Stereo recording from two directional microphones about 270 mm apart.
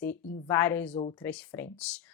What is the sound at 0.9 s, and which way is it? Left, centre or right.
Speech, left.